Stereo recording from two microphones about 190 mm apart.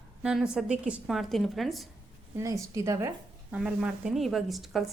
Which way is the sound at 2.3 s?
15° right (ahead or behind).